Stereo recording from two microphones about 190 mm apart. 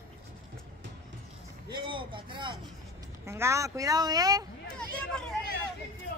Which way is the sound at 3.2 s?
15° right (ahead or behind).